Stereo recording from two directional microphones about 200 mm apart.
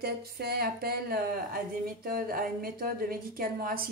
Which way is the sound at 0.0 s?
50° right (ahead or behind).